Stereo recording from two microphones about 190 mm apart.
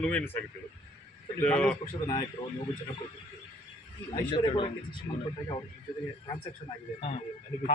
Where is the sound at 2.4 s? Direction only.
20° left (ahead or behind).